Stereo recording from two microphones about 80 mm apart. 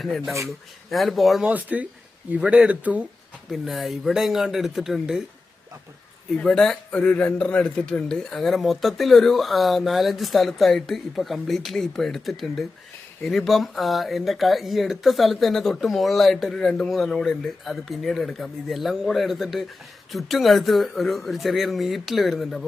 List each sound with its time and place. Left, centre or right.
0.0 s speech: centre
1.5 s speech: centre
3.5 s speech: centre
6.3 s speech: centre